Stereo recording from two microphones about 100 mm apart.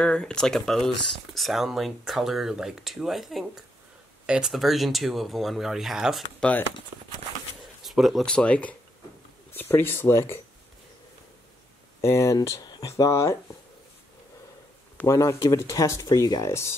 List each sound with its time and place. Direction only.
0.0 s speech: 10° left (ahead or behind)
7.8 s speech: centre (ahead or behind); by 10.4 s 25° left (ahead or behind)
12.0 s speech: 30° left (ahead or behind)
15.0 s speech: 30° left (ahead or behind)